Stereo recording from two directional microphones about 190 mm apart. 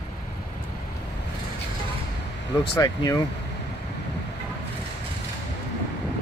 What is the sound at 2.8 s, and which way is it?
Speech, 20° left (ahead or behind).